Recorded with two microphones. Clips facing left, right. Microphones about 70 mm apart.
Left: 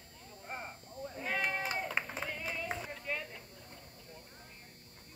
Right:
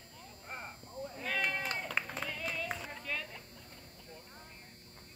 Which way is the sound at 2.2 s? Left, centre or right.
Centre.